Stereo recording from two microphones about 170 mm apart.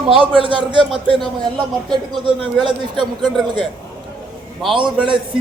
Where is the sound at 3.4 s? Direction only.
25° right (ahead or behind).